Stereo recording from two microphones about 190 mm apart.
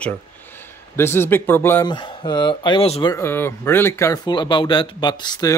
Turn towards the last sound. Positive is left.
turn(degrees=20)  # may be behind; listen again after turning